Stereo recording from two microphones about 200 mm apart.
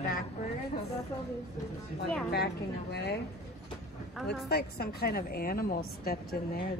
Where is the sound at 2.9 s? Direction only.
55° left (ahead or behind).